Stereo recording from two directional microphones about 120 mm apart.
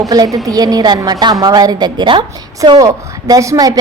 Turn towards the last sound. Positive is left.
turn(degrees=-30)  # may be behind; listen again after turning